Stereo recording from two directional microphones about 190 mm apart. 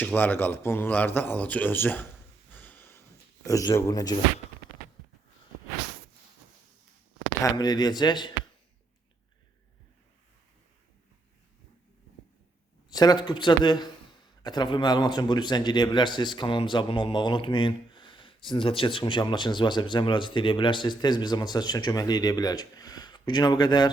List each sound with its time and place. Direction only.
0.0 s speech: 10° left (ahead or behind)
2.5 s snort: 10° left (ahead or behind)
3.4 s speech: 20° left (ahead or behind)
7.4 s speech: 20° left (ahead or behind)
12.9 s speech: 20° left (ahead or behind)